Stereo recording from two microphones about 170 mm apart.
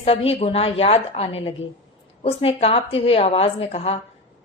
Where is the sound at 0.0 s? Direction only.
35° left (ahead or behind).